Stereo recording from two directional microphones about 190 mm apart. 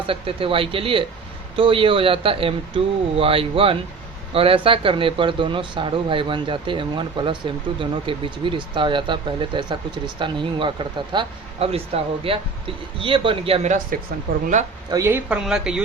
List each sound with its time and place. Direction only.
0.1 s speech: 30° right (ahead or behind)
14.8 s speech: 15° right (ahead or behind)